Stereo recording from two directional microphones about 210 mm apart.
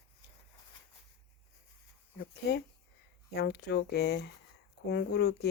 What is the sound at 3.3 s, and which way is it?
Speech, 50° left (ahead or behind).